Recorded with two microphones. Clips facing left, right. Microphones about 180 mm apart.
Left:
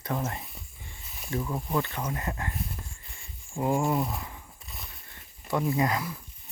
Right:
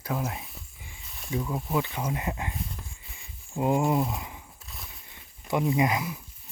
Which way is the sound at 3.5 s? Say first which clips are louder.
Right 2 dB; 20° right (ahead or behind).